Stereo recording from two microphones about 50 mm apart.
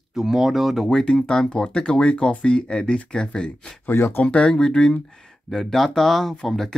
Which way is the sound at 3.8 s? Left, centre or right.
Left.